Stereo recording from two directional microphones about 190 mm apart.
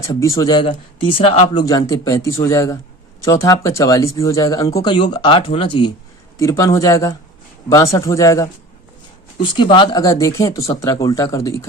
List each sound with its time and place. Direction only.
0.0 s speech: 15° left (ahead or behind)
1.6 s a man's voice: 20° left (ahead or behind)
6.4 s a man's voice: 15° left (ahead or behind)